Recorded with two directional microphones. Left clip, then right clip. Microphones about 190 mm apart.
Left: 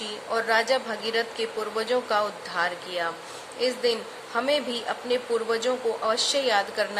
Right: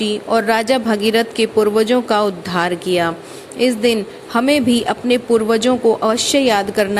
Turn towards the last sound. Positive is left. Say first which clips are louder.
# right 9 dB
turn(degrees=-35)  # may be behind; listen again after turning